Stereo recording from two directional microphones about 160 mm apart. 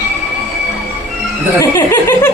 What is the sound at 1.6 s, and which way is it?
Speech, 15° left (ahead or behind).